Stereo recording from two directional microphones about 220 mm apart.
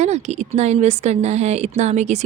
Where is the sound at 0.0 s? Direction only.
30° right (ahead or behind).